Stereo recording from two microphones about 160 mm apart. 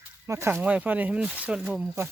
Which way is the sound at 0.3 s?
15° right (ahead or behind).